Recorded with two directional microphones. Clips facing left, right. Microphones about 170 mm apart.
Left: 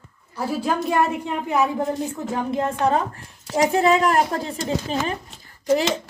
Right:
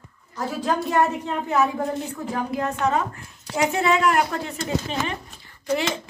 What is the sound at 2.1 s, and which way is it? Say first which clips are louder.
A child's voice: left 2 dB; 25° left (ahead or behind).